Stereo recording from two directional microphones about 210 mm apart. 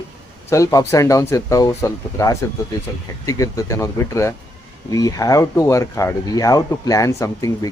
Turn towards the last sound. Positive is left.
turn(degrees=15)  # may be behind; listen again after turning